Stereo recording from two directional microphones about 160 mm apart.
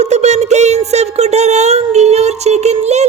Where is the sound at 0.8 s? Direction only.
40° right (ahead or behind).